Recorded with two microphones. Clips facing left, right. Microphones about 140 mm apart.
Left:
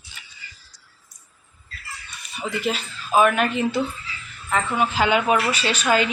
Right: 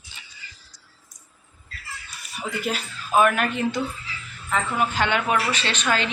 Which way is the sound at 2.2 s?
Centre (ahead or behind).